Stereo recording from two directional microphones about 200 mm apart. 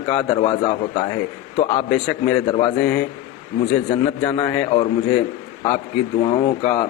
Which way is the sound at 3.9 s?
25° left (ahead or behind).